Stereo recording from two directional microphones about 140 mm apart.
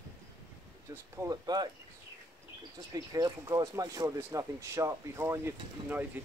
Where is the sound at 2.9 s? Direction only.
25° right (ahead or behind).